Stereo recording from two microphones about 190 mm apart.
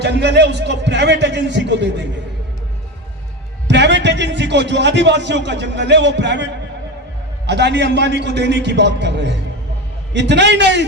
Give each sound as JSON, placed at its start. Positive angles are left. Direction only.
{"t": 0.0, "sound": "a man's voice", "side_deg": -65}
{"t": 3.7, "sound": "a man's voice", "side_deg": -65}